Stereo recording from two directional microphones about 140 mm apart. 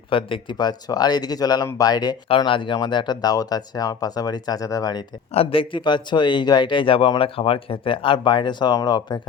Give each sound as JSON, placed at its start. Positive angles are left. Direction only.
{"t": 0.1, "sound": "speech", "side_deg": 40}
{"t": 5.3, "sound": "speech", "side_deg": 45}